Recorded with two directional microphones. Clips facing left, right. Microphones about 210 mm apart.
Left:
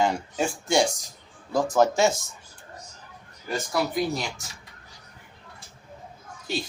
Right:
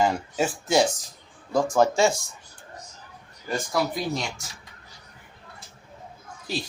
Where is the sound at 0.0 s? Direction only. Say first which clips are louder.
Right 1 dB; 5° right (ahead or behind).